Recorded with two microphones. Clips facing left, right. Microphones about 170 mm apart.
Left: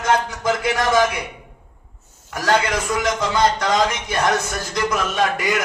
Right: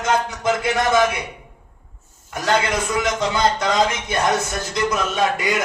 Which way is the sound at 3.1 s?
25° right (ahead or behind).